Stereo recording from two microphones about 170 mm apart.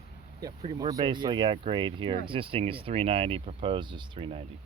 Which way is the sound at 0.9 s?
25° right (ahead or behind).